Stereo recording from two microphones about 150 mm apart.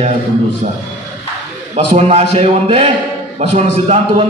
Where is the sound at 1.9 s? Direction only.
45° right (ahead or behind).